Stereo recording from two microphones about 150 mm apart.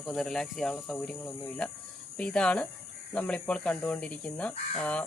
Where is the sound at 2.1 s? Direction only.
5° left (ahead or behind).